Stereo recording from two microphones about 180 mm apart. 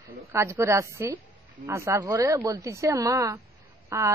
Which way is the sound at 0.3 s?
15° right (ahead or behind).